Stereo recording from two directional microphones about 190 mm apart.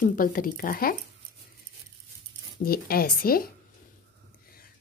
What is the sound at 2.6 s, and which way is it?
Speech, 50° left (ahead or behind).